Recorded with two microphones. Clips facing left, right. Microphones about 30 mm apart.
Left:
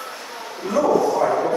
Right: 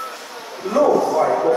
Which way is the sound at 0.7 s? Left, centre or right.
Right.